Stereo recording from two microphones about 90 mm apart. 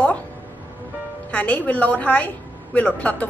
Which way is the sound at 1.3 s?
15° left (ahead or behind).